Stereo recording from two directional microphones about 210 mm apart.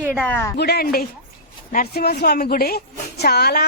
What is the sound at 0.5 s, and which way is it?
A woman's voice, 50° left (ahead or behind).